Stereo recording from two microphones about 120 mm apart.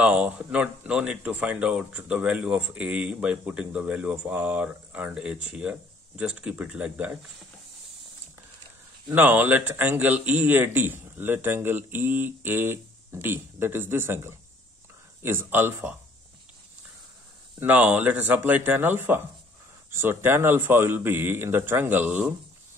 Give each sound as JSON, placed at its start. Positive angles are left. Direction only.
{"t": 0.0, "sound": "speech", "side_deg": -10}
{"t": 9.1, "sound": "speech", "side_deg": -15}
{"t": 17.6, "sound": "speech", "side_deg": -15}